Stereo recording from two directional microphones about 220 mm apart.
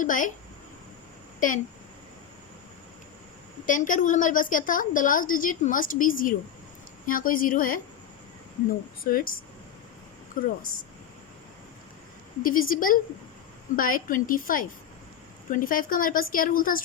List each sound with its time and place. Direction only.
0.0 s a woman's voice: 35° left (ahead or behind)
1.4 s speech: 35° left (ahead or behind)
3.7 s a woman's voice: 35° left (ahead or behind)
9.0 s a woman's voice: 40° left (ahead or behind)
10.4 s a woman's voice: 40° left (ahead or behind)
12.4 s a woman's voice: 40° left (ahead or behind)